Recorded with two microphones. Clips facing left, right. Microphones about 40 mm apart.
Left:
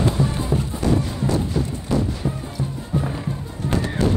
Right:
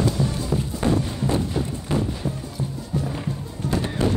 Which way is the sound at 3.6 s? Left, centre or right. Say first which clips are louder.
Left 2 dB; left.